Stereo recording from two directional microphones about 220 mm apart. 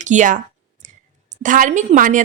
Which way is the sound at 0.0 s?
35° right (ahead or behind).